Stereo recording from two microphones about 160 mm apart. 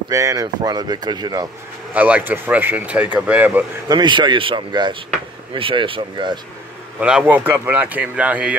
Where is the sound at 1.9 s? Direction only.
10° right (ahead or behind).